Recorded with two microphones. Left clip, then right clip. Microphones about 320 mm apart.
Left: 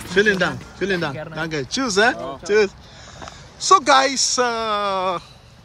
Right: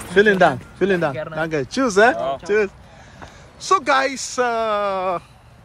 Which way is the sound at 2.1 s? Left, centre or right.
Right.